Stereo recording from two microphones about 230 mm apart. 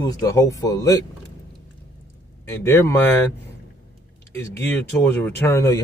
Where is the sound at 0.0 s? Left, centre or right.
Centre.